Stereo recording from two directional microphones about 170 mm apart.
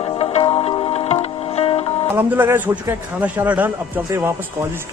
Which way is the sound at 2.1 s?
10° right (ahead or behind).